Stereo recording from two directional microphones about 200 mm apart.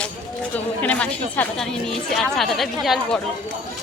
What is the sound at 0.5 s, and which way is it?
Speech, 10° left (ahead or behind).